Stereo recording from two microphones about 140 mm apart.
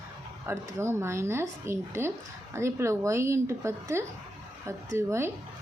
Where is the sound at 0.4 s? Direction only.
20° right (ahead or behind).